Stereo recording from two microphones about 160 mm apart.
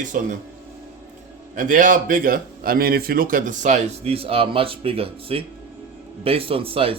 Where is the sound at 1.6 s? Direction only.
55° right (ahead or behind).